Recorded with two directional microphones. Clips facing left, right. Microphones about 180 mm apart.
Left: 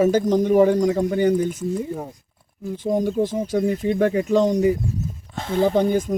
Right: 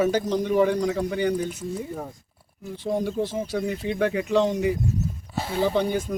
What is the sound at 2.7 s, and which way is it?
Speech, 45° left (ahead or behind).